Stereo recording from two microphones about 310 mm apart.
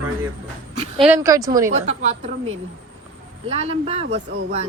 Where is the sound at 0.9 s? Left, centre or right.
Centre.